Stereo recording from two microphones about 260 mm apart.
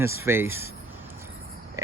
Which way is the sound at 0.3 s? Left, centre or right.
Centre.